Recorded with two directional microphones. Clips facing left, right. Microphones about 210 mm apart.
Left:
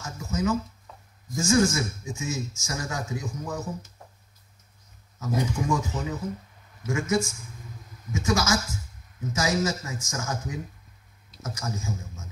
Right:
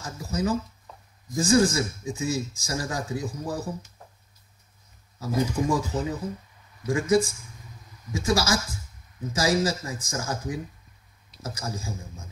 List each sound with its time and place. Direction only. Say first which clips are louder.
0.0 s speech: even; 35° right (ahead or behind)
5.2 s speech: right 2 dB; 35° right (ahead or behind)